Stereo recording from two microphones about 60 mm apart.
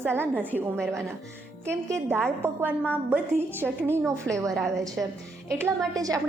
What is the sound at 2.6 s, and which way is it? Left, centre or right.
Speech, left.